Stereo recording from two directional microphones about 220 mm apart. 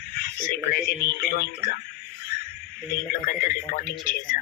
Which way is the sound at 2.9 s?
40° left (ahead or behind).